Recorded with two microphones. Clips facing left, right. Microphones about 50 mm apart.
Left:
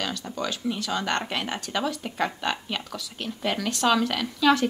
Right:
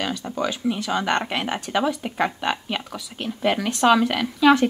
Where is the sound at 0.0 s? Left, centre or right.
Centre.